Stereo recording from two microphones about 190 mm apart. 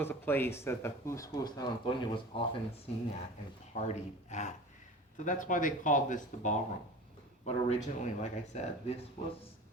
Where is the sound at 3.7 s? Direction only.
35° left (ahead or behind).